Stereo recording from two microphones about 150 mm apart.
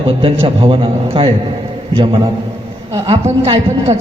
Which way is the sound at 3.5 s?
45° right (ahead or behind).